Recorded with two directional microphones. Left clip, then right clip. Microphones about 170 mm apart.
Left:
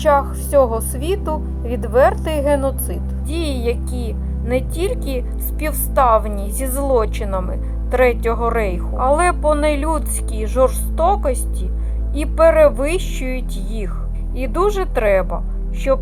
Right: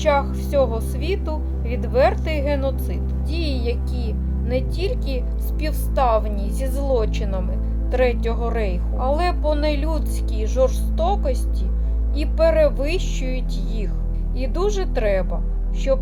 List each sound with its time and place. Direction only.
0.0 s speech: 15° left (ahead or behind)